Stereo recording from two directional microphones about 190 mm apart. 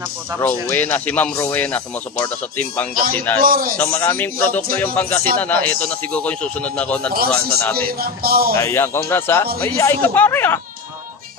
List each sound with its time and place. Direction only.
0.4 s a man's voice: 10° left (ahead or behind)
3.3 s speech: 50° right (ahead or behind)
3.7 s a man's voice: 10° left (ahead or behind)
7.7 s speech: 50° right (ahead or behind)
8.5 s a man's voice: 15° left (ahead or behind)